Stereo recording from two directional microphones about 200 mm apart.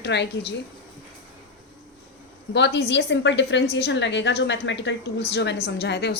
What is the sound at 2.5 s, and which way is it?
A woman's voice, 60° left (ahead or behind).